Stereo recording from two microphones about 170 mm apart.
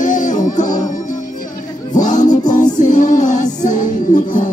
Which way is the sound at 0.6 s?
25° left (ahead or behind).